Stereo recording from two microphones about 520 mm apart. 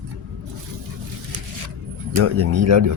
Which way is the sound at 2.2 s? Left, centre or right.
Right.